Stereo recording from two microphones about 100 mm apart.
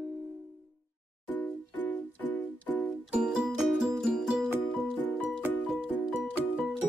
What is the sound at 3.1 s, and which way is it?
Music, 10° right (ahead or behind).